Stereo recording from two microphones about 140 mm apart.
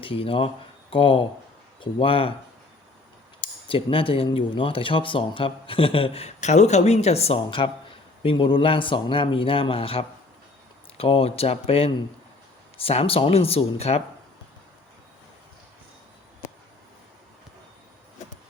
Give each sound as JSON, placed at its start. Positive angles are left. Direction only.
{"t": 0.0, "sound": "speech", "side_deg": 40}
{"t": 3.4, "sound": "speech", "side_deg": 40}